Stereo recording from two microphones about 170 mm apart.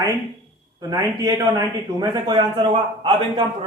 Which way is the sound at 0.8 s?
20° right (ahead or behind).